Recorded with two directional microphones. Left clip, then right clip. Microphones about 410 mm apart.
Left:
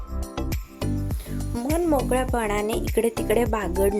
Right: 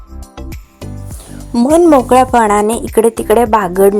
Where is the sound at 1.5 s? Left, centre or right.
Left.